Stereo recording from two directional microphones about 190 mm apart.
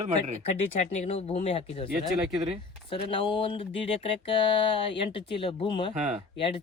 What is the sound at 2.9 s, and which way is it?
Speech, 25° left (ahead or behind).